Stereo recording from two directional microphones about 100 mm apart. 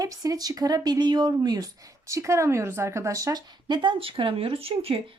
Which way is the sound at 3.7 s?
50° right (ahead or behind).